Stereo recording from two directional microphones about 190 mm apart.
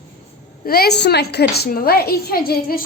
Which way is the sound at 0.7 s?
55° left (ahead or behind).